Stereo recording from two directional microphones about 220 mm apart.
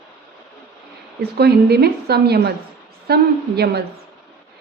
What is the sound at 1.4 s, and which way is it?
A woman's voice, 45° right (ahead or behind).